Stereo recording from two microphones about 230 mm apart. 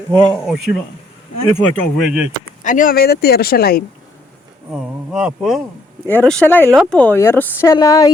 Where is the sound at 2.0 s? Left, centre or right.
Centre.